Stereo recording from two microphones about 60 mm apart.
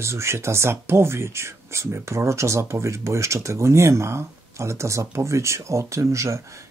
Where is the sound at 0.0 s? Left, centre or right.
Right.